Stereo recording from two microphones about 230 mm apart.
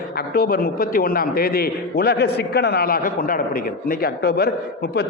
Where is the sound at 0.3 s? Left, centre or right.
Left.